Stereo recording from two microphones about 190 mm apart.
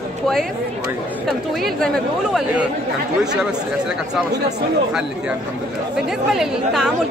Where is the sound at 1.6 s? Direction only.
Centre (ahead or behind).